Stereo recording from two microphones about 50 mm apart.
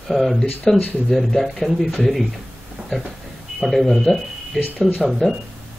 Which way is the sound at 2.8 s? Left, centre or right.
Right.